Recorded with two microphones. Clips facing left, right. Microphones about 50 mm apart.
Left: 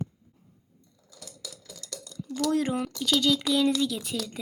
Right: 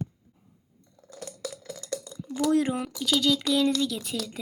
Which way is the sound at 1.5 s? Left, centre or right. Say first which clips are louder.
Right 10 dB; right.